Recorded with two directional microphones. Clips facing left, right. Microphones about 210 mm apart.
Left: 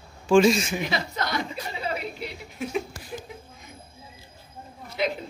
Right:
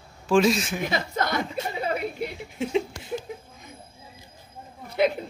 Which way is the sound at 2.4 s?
25° right (ahead or behind).